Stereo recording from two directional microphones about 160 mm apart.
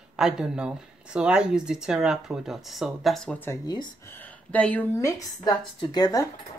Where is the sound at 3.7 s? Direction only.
30° left (ahead or behind).